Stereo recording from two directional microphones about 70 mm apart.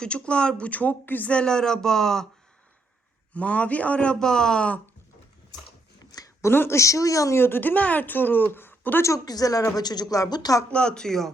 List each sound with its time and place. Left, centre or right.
0.0 s speech: centre
3.3 s speech: centre
6.1 s a sound: left
6.4 s speech: left
7.3 s speech: left
9.0 s speech: left
10.7 s speech: centre